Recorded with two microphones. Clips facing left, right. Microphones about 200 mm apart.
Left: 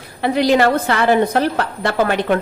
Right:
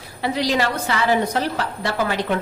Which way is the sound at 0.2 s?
55° left (ahead or behind).